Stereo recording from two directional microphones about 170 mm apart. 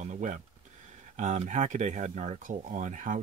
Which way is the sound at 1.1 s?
45° right (ahead or behind).